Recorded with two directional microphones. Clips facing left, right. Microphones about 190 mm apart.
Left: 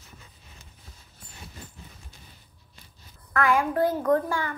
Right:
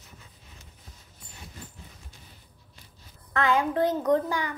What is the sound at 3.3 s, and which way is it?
A child's voice, 25° right (ahead or behind).